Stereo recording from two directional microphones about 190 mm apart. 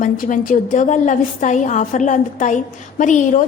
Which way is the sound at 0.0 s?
45° left (ahead or behind).